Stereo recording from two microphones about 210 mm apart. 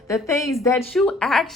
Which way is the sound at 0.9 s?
Centre (ahead or behind).